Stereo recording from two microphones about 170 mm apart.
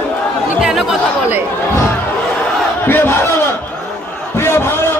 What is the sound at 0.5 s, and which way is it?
Chatter, centre (ahead or behind).